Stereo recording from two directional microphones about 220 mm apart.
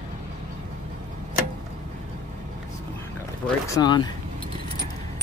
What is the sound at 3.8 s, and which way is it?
Speech, 20° left (ahead or behind).